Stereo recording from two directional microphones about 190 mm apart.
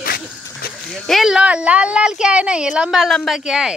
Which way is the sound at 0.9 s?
Centre (ahead or behind).